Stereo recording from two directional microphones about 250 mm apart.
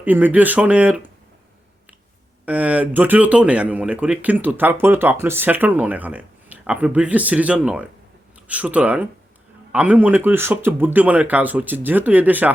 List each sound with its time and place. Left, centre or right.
0.0 s speech: centre
2.5 s speech: centre